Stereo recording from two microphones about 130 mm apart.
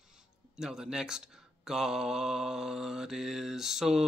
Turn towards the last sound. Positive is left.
turn(degrees=-5)  # may be behind; listen again after turning